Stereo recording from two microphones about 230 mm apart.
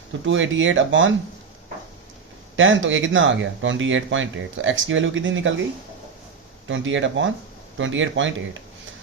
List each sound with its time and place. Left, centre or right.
0.3 s speech: right
2.6 s speech: right
6.7 s speech: right